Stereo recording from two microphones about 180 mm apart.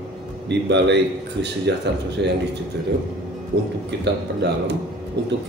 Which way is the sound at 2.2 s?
65° right (ahead or behind).